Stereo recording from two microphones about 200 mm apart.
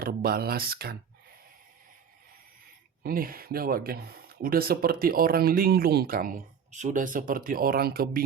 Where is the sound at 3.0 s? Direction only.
45° right (ahead or behind).